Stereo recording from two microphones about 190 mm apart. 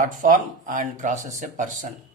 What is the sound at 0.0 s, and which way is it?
Speech, 45° right (ahead or behind).